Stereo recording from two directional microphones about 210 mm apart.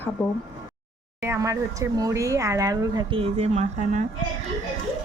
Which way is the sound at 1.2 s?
15° right (ahead or behind).